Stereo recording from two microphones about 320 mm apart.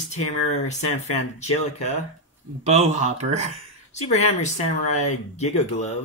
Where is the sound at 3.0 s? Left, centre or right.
Right.